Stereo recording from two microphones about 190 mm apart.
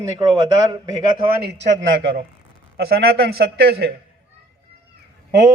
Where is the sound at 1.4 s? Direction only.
65° right (ahead or behind).